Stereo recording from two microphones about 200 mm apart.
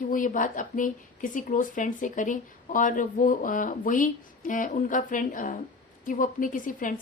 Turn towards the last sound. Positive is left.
turn(degrees=40)  # may be behind; listen again after turning